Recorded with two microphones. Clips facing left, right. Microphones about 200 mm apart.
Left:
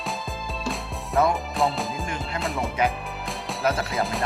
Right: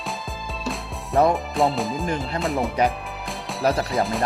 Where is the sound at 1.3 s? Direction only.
Centre (ahead or behind).